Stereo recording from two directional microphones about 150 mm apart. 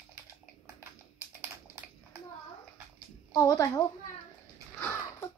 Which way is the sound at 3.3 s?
20° left (ahead or behind).